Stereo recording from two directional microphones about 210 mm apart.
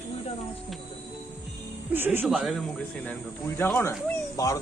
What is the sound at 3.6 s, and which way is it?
Speech, 10° left (ahead or behind).